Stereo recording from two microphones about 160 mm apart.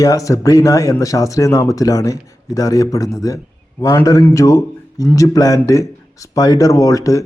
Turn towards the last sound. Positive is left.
turn(degrees=20)  # may be behind; listen again after turning